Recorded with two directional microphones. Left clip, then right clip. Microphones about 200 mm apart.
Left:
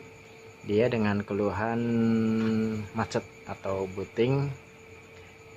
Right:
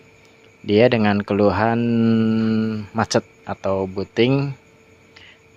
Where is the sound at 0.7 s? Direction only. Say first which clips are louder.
Right 10 dB; 50° right (ahead or behind).